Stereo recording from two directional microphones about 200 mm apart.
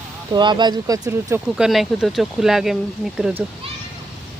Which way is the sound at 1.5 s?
Centre (ahead or behind).